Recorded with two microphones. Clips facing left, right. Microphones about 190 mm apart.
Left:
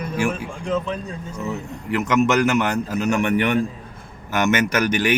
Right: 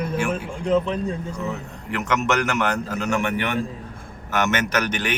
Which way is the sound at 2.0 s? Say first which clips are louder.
Left 4 dB; 10° left (ahead or behind).